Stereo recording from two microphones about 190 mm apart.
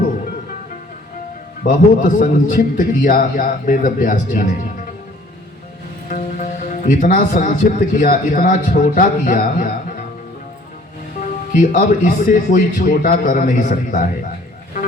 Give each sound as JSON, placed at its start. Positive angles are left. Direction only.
{"t": 1.6, "sound": "a man's voice", "side_deg": 45}
{"t": 6.1, "sound": "speech", "side_deg": 45}
{"t": 11.6, "sound": "a man's voice", "side_deg": 45}